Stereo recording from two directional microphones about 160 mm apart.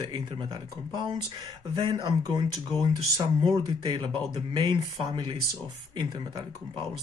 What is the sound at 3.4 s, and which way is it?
Speech, 25° right (ahead or behind).